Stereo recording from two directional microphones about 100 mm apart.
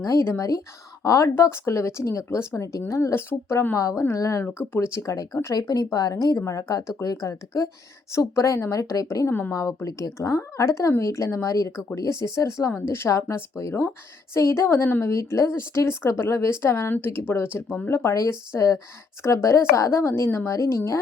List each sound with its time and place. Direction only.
0.0 s a woman's voice: 30° left (ahead or behind)